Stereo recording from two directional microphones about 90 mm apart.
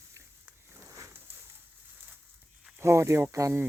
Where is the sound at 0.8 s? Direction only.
35° right (ahead or behind).